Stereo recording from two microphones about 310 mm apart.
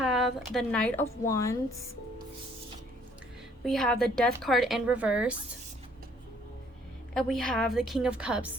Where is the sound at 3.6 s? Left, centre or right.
Centre.